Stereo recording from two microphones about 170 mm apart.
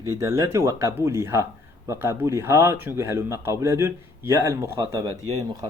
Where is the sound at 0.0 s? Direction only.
15° right (ahead or behind).